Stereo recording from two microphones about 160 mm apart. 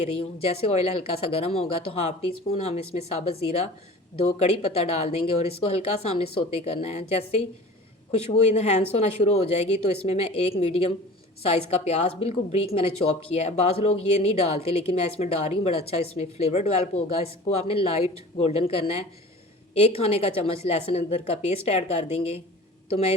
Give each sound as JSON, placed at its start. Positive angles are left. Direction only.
{"t": 0.0, "sound": "a woman's voice", "side_deg": 40}
{"t": 8.1, "sound": "a woman's voice", "side_deg": 40}